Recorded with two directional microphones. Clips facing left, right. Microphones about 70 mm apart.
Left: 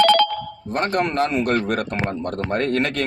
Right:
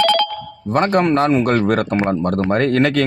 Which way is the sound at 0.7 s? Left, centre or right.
Right.